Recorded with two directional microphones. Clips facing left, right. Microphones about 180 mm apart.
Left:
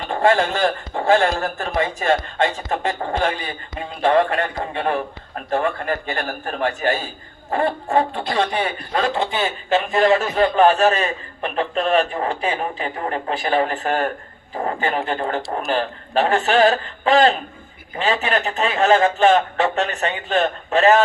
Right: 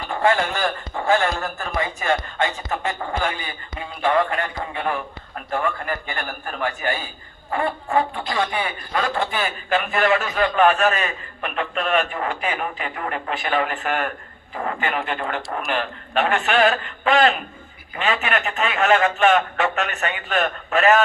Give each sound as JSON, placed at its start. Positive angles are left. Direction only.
{"t": 0.1, "sound": "a man's voice", "side_deg": 30}